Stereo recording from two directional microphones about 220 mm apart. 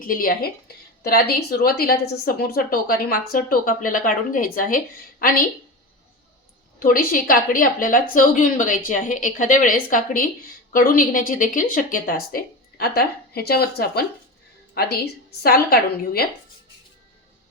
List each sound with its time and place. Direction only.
0.0 s a woman's voice: 40° left (ahead or behind)
6.7 s a woman's voice: 40° left (ahead or behind)